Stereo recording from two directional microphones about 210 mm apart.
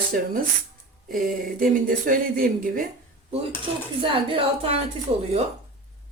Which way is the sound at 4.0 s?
25° right (ahead or behind).